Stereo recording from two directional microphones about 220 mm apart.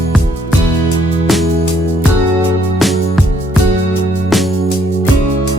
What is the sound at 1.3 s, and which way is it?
Music, centre (ahead or behind).